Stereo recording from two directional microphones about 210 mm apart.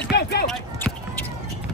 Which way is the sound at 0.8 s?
5° left (ahead or behind).